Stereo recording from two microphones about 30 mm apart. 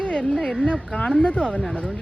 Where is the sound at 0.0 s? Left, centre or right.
Left.